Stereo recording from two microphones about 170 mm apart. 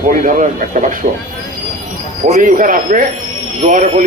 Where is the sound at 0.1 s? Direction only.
50° right (ahead or behind).